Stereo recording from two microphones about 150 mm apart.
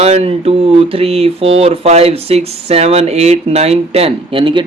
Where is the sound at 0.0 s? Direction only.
45° right (ahead or behind).